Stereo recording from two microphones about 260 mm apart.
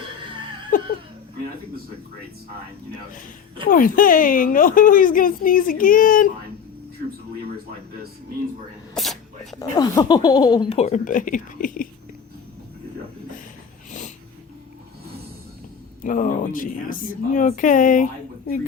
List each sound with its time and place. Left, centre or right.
0.7 s laughter: left
3.7 s a woman's voice: left
9.0 s sneeze: centre
9.6 s speech: centre; by 11.9 s left
16.0 s a woman's voice: left